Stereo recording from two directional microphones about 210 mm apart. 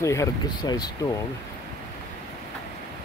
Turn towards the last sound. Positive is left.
turn(degrees=20)  # may be behind; listen again after turning